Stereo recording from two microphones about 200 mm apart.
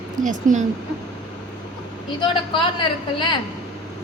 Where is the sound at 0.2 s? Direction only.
40° right (ahead or behind).